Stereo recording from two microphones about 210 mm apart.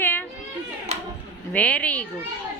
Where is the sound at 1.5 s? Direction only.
5° left (ahead or behind).